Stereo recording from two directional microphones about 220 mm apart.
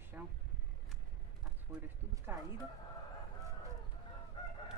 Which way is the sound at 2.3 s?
10° right (ahead or behind).